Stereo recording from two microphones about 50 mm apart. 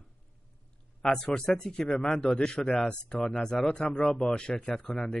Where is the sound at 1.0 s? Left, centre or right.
Centre.